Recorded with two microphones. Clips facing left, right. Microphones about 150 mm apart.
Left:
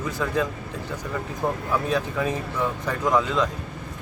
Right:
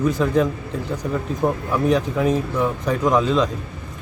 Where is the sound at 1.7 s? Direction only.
15° right (ahead or behind).